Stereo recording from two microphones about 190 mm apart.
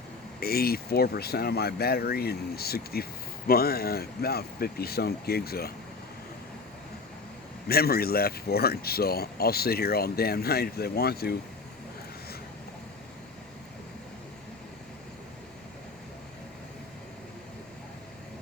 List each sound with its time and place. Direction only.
0.3 s speech: 55° left (ahead or behind)
7.7 s speech: 55° left (ahead or behind)